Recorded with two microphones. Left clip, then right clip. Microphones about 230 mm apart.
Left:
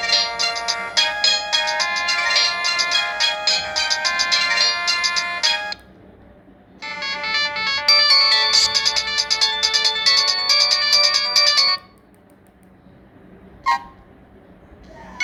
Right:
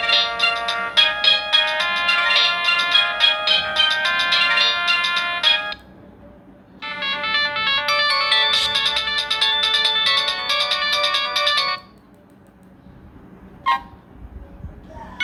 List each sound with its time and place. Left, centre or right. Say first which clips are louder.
0.0 s music: right 2 dB; centre
6.7 s ringtone: right 2 dB; centre